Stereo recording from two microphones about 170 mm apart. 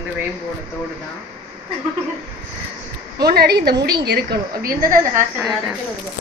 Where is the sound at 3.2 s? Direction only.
65° right (ahead or behind).